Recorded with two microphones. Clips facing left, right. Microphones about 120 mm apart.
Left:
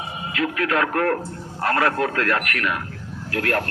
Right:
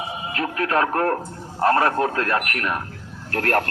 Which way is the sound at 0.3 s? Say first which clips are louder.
Even; 35° right (ahead or behind).